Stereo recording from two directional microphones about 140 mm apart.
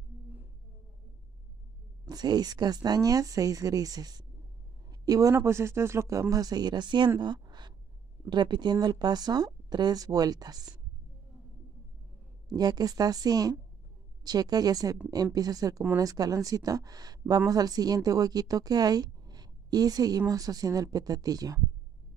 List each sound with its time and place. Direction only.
2.0 s speech: 30° right (ahead or behind)
7.2 s a sound: 30° right (ahead or behind)
8.3 s speech: 35° right (ahead or behind)
12.4 s speech: 30° right (ahead or behind)